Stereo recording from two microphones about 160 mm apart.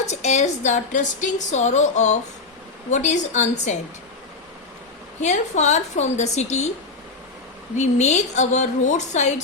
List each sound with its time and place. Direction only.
0.0 s a woman's voice: 45° left (ahead or behind)
5.2 s a woman's voice: 45° left (ahead or behind)
7.8 s a woman's voice: 45° left (ahead or behind)